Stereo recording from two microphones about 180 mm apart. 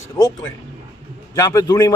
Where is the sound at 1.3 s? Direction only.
20° left (ahead or behind).